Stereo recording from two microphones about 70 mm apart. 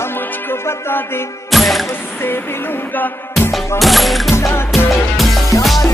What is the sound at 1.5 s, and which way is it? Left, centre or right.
Music, centre.